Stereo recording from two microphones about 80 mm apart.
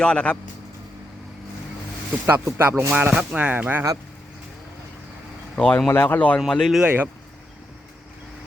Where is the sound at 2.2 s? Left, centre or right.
Right.